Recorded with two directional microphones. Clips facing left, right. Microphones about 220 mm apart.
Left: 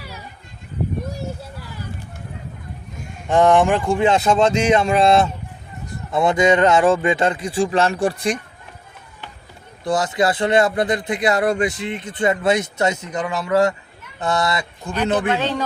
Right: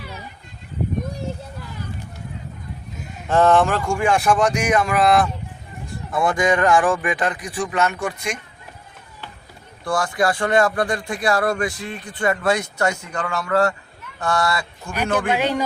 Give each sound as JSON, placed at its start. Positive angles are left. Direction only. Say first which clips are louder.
{"t": 3.2, "sound": "a man's voice", "louder": "left 2 dB", "side_deg": 15}
{"t": 9.8, "sound": "a man's voice", "louder": "left 2 dB", "side_deg": 20}
{"t": 15.3, "sound": "a man's voice", "louder": "even", "side_deg": -10}